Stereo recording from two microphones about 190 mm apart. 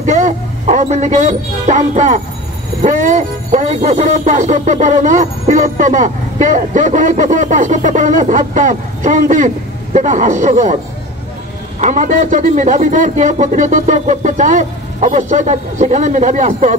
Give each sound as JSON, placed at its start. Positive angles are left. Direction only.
{"t": 0.0, "sound": "speech", "side_deg": -40}
{"t": 11.8, "sound": "speech", "side_deg": -40}